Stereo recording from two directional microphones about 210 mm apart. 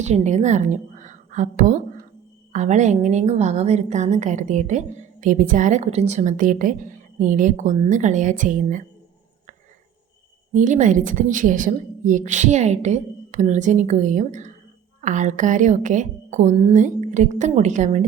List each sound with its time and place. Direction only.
0.0 s a woman's voice: 35° right (ahead or behind)
10.5 s a woman's voice: 35° right (ahead or behind)